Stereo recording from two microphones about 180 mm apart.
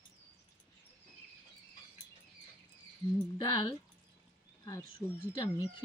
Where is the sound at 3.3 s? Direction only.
20° left (ahead or behind).